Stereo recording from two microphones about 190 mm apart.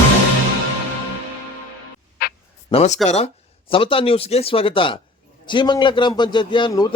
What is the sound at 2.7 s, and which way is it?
A man's voice, 35° left (ahead or behind).